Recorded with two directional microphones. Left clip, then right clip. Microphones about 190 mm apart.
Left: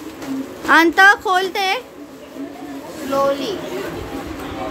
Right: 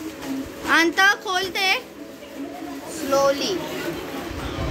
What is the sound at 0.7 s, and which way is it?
A woman's voice, 25° left (ahead or behind).